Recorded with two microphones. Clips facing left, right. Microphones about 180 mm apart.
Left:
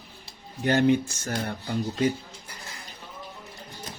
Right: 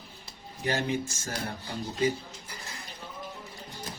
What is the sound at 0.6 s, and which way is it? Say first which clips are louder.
Speech: left 8 dB; 60° left (ahead or behind).